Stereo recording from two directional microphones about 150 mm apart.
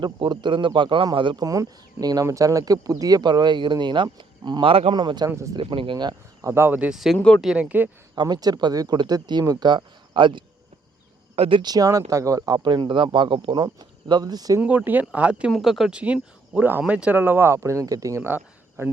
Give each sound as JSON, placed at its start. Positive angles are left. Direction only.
{"t": 0.0, "sound": "speech", "side_deg": -30}
{"t": 7.2, "sound": "speech", "side_deg": 10}
{"t": 7.4, "sound": "speech", "side_deg": -5}
{"t": 8.1, "sound": "speech", "side_deg": -30}
{"t": 14.6, "sound": "speech", "side_deg": -10}